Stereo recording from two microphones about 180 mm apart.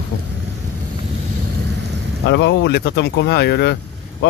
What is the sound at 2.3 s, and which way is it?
Speech, 75° left (ahead or behind).